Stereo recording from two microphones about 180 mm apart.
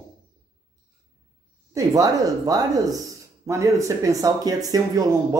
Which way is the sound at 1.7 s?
20° right (ahead or behind).